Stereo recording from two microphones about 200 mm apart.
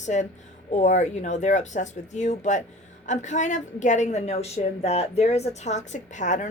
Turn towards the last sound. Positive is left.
turn(degrees=35)  # may be behind; listen again after turning